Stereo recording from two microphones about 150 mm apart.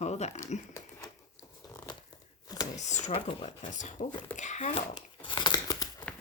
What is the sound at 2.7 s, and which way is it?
Speech, 50° left (ahead or behind).